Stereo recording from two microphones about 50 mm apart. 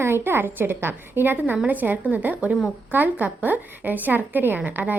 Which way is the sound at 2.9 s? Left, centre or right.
Right.